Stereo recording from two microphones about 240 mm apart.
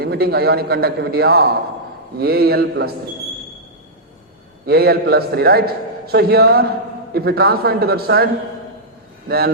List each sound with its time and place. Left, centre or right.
0.0 s a man's voice: right
4.6 s a man's voice: right